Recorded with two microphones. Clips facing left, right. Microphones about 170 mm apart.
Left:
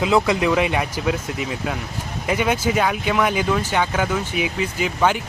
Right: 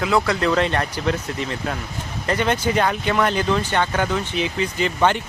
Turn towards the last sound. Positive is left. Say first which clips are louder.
# right 1 dB
turn(degrees=5)  # may be behind; listen again after turning